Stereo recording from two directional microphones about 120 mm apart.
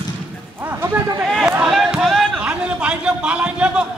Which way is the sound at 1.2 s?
Centre (ahead or behind).